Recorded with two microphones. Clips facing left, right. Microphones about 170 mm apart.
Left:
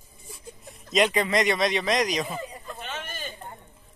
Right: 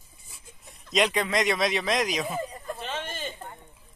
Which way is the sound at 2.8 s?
30° right (ahead or behind).